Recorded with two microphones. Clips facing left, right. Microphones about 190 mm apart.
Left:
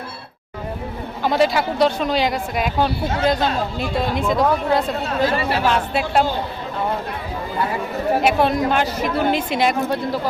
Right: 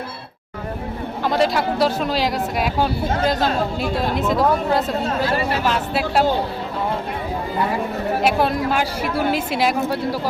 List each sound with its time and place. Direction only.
1.2 s a woman's voice: centre (ahead or behind)
8.2 s a woman's voice: centre (ahead or behind)